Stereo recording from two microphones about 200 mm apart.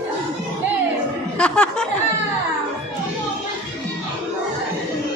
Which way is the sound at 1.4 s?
5° left (ahead or behind).